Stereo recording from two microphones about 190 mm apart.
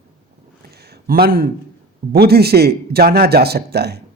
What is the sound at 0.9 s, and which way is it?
A man's voice, 50° right (ahead or behind).